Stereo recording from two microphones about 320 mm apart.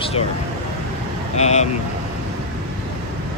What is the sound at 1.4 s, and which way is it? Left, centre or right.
Speech, left.